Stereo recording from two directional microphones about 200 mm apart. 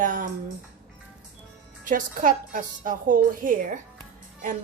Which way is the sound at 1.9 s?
40° right (ahead or behind).